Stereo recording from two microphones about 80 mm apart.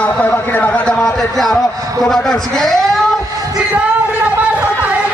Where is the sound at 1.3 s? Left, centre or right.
Centre.